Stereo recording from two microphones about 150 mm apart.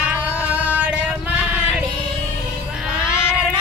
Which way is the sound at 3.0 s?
15° left (ahead or behind).